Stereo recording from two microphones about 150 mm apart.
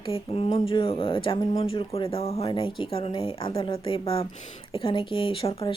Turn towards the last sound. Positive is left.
turn(degrees=35)  # may be behind; listen again after turning